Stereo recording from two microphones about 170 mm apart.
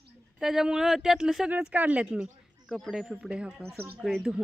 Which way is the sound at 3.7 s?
65° right (ahead or behind).